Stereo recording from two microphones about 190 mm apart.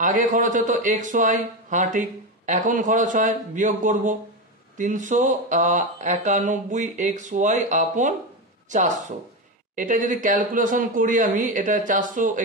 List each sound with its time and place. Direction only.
0.0 s speech: 45° right (ahead or behind)